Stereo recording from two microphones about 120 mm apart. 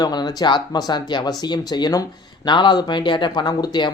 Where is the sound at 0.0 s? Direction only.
35° left (ahead or behind).